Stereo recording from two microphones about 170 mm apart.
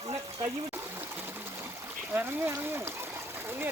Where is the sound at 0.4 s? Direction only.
15° right (ahead or behind).